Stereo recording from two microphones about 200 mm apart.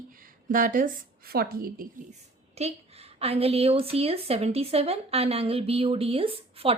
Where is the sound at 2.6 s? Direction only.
30° right (ahead or behind).